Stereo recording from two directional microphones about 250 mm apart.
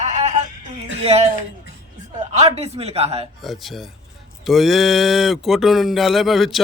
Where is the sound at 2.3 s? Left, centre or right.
Right.